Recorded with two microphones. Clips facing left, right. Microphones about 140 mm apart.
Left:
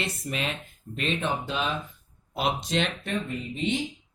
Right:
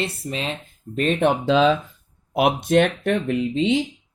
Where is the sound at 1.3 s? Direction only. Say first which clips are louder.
Right 12 dB; 90° right.